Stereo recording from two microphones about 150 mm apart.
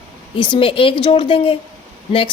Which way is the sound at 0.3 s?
30° left (ahead or behind).